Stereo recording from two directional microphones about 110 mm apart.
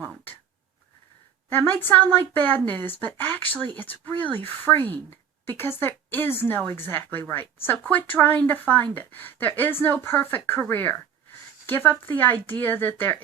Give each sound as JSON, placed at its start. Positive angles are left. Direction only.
{"t": 1.8, "sound": "a woman's voice", "side_deg": 20}